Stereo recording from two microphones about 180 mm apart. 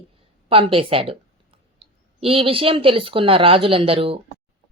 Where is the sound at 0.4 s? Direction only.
30° right (ahead or behind).